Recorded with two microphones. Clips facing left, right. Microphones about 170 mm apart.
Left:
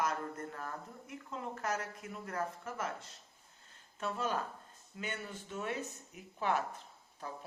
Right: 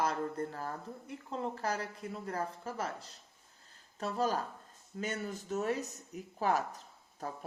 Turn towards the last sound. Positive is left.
turn(degrees=-40)  # may be behind; listen again after turning